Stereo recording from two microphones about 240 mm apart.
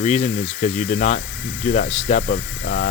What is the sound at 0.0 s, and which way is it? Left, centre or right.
Speech, left.